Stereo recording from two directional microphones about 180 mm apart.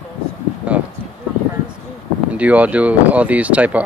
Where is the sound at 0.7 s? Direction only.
10° right (ahead or behind).